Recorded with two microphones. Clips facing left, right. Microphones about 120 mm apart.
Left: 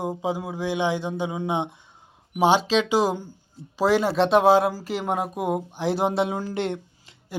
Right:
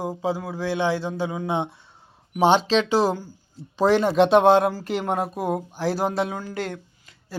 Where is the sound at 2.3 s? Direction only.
10° left (ahead or behind).